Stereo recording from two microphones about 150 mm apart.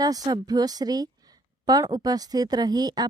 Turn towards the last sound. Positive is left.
turn(degrees=-25)  # may be behind; listen again after turning